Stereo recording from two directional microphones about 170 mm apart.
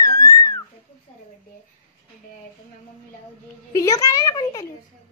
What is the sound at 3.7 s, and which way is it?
Speech, 20° left (ahead or behind).